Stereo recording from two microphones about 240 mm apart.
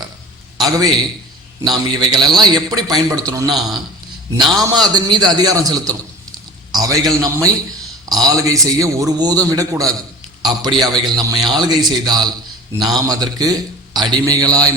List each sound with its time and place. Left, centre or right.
0.6 s a man's voice: centre